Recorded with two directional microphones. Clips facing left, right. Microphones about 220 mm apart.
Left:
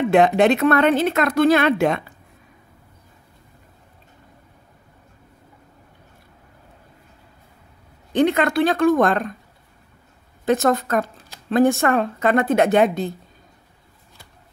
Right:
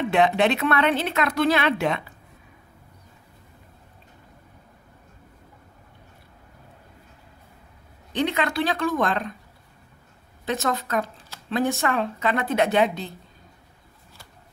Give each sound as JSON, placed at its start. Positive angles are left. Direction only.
{"t": 0.1, "sound": "speech", "side_deg": 45}
{"t": 8.1, "sound": "speech", "side_deg": 50}
{"t": 10.4, "sound": "speech", "side_deg": 50}